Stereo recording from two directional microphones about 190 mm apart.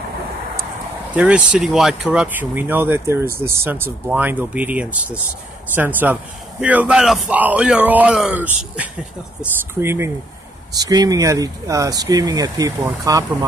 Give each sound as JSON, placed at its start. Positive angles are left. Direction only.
{"t": 1.1, "sound": "speech", "side_deg": -5}